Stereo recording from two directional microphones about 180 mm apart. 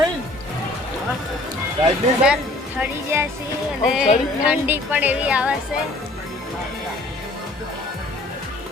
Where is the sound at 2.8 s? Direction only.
15° right (ahead or behind).